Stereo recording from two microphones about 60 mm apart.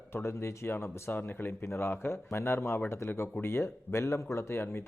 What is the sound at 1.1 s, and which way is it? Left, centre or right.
Speech, left.